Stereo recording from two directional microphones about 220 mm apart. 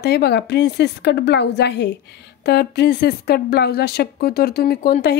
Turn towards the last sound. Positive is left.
turn(degrees=45)  # may be behind; listen again after turning